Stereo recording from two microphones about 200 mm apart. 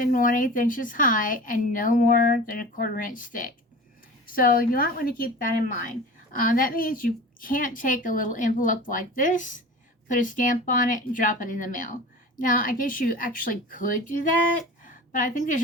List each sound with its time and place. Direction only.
0.0 s a woman's voice: 45° left (ahead or behind)